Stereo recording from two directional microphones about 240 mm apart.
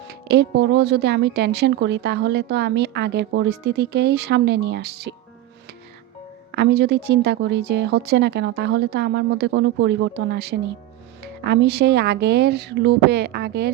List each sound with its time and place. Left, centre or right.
0.1 s a woman's voice: right
6.5 s a woman's voice: right